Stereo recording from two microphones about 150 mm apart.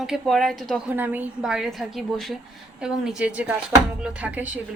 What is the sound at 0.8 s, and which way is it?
A woman's voice, 10° right (ahead or behind).